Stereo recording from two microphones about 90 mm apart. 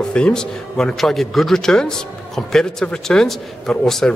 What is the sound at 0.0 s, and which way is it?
A man's voice, 10° left (ahead or behind).